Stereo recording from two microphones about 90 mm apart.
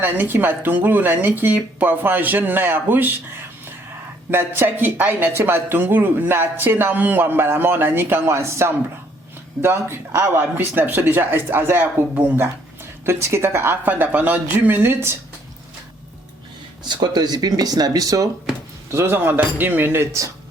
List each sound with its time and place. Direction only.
0.0 s speech: 20° right (ahead or behind)
16.9 s speech: 55° right (ahead or behind)
18.9 s speech: 30° right (ahead or behind)